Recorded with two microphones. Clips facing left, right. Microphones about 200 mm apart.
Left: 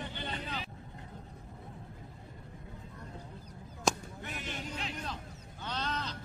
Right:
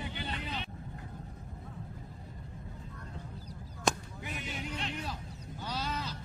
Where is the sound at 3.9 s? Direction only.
Centre (ahead or behind).